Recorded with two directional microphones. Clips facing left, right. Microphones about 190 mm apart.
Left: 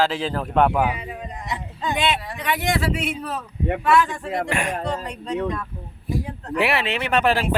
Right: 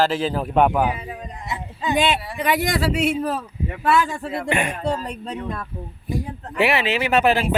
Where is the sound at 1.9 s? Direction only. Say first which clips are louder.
Right 4 dB; 35° right (ahead or behind).